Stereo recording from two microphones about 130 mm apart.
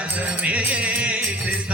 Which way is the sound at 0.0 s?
10° right (ahead or behind).